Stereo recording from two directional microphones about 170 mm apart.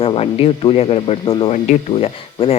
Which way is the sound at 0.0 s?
35° left (ahead or behind).